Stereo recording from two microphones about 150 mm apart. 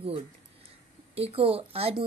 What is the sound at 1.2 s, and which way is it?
Speech, 40° right (ahead or behind).